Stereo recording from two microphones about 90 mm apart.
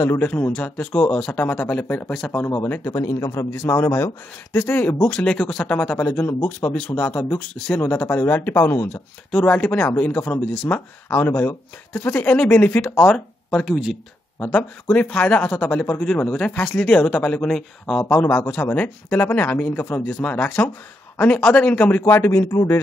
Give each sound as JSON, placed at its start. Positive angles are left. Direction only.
{"t": 0.0, "sound": "speech", "side_deg": 30}
{"t": 0.3, "sound": "speech", "side_deg": 15}
{"t": 2.3, "sound": "speech", "side_deg": 30}
{"t": 5.9, "sound": "speech", "side_deg": 25}
{"t": 9.3, "sound": "speech", "side_deg": 15}
{"t": 13.7, "sound": "speech", "side_deg": -10}
{"t": 14.4, "sound": "speech", "side_deg": 20}
{"t": 18.1, "sound": "speech", "side_deg": 20}
{"t": 22.0, "sound": "speech", "side_deg": 30}